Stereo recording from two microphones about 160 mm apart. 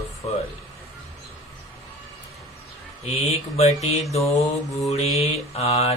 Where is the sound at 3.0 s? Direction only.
40° left (ahead or behind).